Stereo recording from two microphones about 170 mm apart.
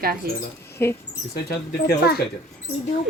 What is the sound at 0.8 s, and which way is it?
Speech, 15° left (ahead or behind).